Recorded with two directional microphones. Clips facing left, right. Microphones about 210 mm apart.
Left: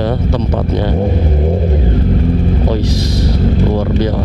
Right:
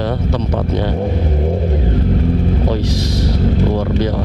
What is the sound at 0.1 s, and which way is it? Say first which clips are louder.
Speech: left 2 dB; 25° left (ahead or behind).